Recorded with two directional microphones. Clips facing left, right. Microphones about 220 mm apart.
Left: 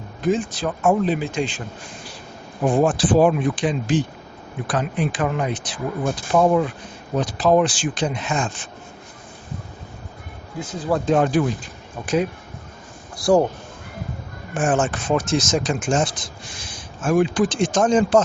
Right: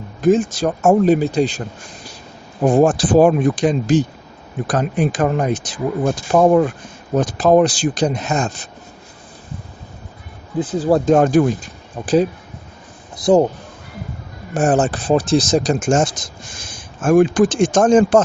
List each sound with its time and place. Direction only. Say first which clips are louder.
0.2 s speech: right 7 dB; 45° right (ahead or behind)
2.6 s speech: right 4 dB; 45° right (ahead or behind)
10.6 s speech: right 7 dB; 35° right (ahead or behind)
13.1 s speech: right 3 dB; 20° right (ahead or behind)
14.5 s speech: right 5 dB; 40° right (ahead or behind)